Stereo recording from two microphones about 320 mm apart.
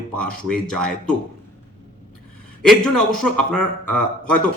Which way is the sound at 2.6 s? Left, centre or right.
Centre.